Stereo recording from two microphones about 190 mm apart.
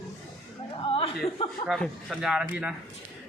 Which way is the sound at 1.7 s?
Centre (ahead or behind).